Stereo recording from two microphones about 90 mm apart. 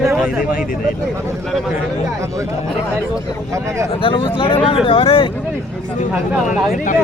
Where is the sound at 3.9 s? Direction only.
80° left.